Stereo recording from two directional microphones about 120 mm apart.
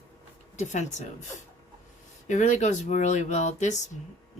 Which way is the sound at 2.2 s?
90° left.